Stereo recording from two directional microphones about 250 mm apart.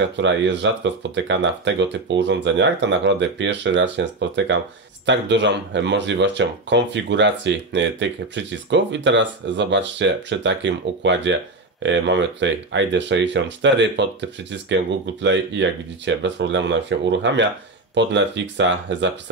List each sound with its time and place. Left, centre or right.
0.0 s speech: right